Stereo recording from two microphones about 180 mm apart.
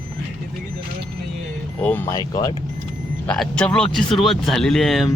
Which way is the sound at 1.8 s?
10° left (ahead or behind).